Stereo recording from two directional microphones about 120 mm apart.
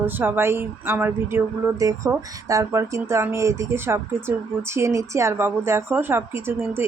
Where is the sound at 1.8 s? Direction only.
30° right (ahead or behind).